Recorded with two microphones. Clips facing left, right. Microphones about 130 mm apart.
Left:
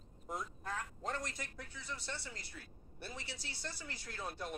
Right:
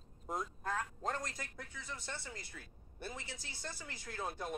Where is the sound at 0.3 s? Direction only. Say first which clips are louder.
Right 3 dB; 45° right (ahead or behind).